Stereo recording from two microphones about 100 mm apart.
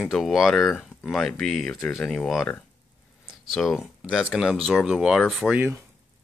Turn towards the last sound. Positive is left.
turn(degrees=-20)  # may be behind; listen again after turning